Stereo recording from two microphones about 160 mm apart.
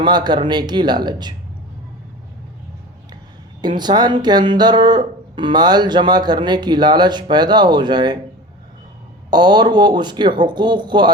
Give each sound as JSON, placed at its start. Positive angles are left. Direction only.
{"t": 0.0, "sound": "speech", "side_deg": -25}
{"t": 3.8, "sound": "speech", "side_deg": -25}
{"t": 9.3, "sound": "speech", "side_deg": -25}